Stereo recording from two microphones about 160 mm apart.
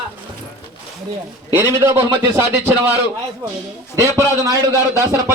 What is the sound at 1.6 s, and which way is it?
Speech, 15° right (ahead or behind).